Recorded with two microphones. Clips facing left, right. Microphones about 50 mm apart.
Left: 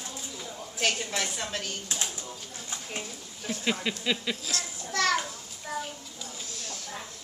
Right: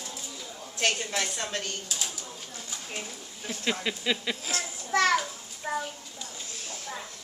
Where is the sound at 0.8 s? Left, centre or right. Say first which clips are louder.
Right 1 dB; centre.